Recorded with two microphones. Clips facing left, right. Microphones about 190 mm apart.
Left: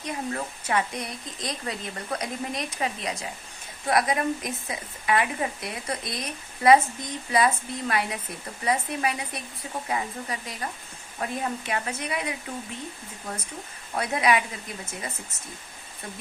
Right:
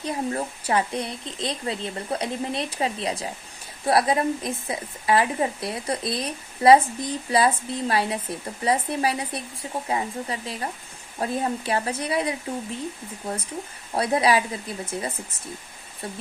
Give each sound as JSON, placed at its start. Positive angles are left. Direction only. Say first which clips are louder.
{"t": 0.0, "sound": "a woman's voice", "louder": "right 4 dB", "side_deg": -30}
{"t": 13.9, "sound": "a woman's voice", "louder": "right 3 dB", "side_deg": -30}